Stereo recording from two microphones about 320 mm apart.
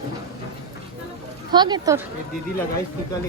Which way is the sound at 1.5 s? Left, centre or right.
Centre.